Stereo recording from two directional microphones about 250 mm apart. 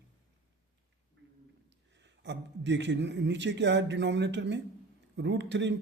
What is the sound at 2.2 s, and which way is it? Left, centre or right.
A man's voice, right.